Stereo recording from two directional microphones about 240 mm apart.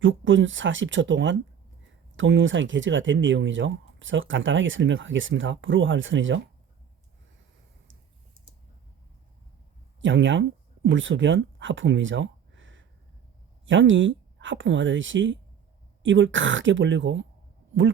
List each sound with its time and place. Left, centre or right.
0.0 s speech: right
10.0 s speech: right